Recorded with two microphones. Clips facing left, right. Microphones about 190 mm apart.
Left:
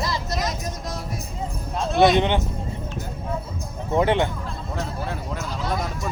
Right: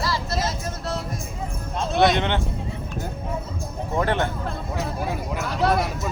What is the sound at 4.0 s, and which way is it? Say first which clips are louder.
Speech: left 3 dB; 15° left (ahead or behind).